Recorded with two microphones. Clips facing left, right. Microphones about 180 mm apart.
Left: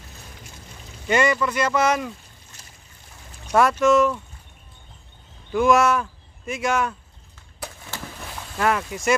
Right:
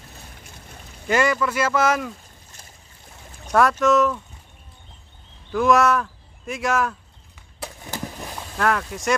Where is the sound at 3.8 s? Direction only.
Centre (ahead or behind).